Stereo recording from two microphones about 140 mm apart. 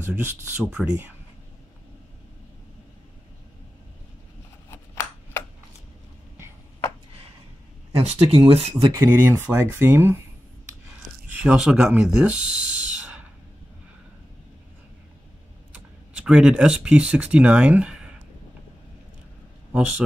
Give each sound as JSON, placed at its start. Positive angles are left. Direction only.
{"t": 0.0, "sound": "speech", "side_deg": -15}
{"t": 4.6, "sound": "a sound", "side_deg": 20}
{"t": 8.0, "sound": "speech", "side_deg": -45}
{"t": 8.9, "sound": "speech", "side_deg": -15}
{"t": 11.3, "sound": "speech", "side_deg": -5}
{"t": 15.7, "sound": "speech", "side_deg": -10}